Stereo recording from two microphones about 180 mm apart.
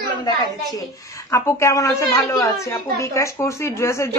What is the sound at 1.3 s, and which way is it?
Speech, 15° left (ahead or behind).